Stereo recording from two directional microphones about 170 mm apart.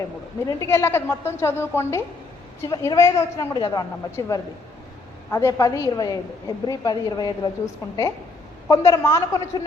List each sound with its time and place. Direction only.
0.4 s a woman's voice: 15° left (ahead or behind)